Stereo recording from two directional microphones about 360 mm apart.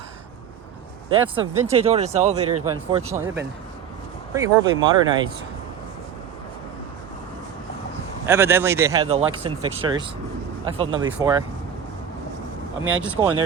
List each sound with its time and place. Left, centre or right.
1.1 s speech: centre
2.9 s speech: centre
8.3 s speech: centre
12.9 s speech: centre